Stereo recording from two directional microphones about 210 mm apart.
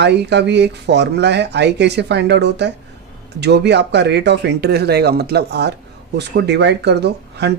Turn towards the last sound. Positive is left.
turn(degrees=-55)  # may be behind; listen again after turning